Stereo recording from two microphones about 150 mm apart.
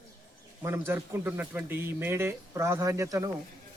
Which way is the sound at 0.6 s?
15° right (ahead or behind).